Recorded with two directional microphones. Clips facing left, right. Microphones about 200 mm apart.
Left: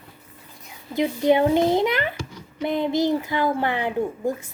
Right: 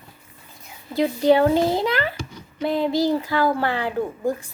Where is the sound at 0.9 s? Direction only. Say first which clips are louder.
Right 2 dB; 20° left (ahead or behind).